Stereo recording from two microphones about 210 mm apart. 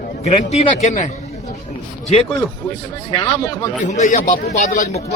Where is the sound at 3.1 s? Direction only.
20° left (ahead or behind).